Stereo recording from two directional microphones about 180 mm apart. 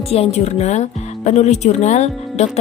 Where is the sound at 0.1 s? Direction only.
35° left (ahead or behind).